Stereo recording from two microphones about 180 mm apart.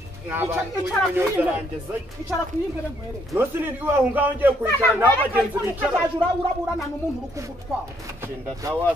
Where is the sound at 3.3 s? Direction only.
10° right (ahead or behind).